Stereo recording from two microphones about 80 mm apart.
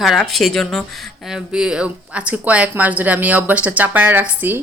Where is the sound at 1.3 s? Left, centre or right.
Centre; by 4.6 s right.